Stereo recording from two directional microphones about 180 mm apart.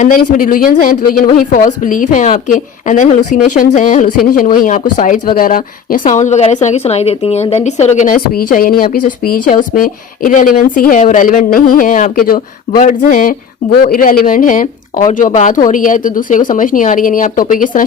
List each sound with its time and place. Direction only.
0.0 s speech: 50° left (ahead or behind)